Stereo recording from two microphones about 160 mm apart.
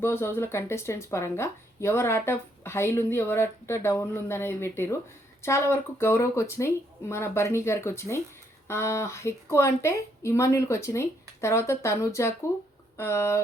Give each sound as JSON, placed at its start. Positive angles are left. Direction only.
{"t": 0.0, "sound": "speech", "side_deg": 15}